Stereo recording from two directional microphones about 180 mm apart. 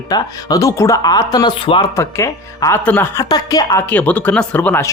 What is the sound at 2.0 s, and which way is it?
Speech, 15° left (ahead or behind).